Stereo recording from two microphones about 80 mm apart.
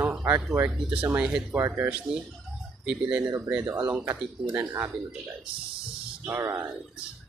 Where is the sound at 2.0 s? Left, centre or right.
Centre.